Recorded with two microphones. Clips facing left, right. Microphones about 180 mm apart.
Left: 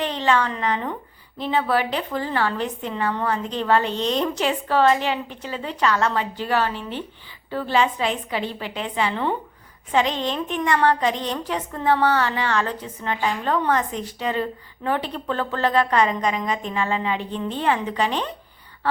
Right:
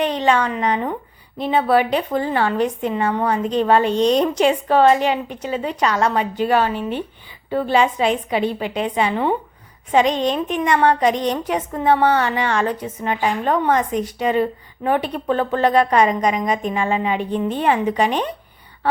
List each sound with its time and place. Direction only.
0.0 s a woman's voice: 15° right (ahead or behind)